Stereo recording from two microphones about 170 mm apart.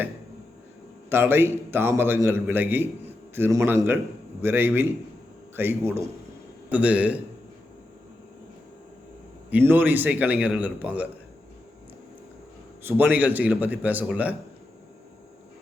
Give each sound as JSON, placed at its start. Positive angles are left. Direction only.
{"t": 1.1, "sound": "a man's voice", "side_deg": -15}
{"t": 9.5, "sound": "a man's voice", "side_deg": -10}
{"t": 12.8, "sound": "a man's voice", "side_deg": -10}